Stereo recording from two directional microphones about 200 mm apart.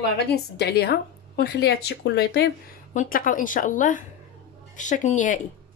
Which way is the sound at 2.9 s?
45° left (ahead or behind).